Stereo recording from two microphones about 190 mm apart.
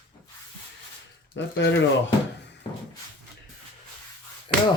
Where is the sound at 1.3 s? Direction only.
70° left (ahead or behind).